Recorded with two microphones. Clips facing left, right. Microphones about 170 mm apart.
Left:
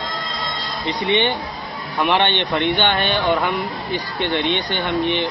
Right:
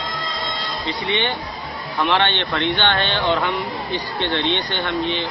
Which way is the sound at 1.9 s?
15° left (ahead or behind).